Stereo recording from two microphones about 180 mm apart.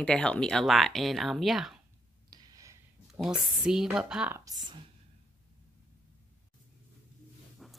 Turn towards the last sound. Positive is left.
turn(degrees=0)  # may be behind; listen again after turning